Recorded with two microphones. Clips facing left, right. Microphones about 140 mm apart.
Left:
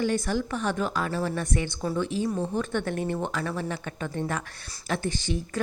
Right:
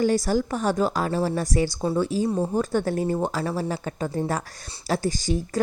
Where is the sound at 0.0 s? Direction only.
40° right (ahead or behind).